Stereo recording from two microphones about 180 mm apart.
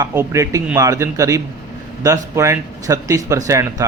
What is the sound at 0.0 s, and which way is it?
Speech, 15° right (ahead or behind).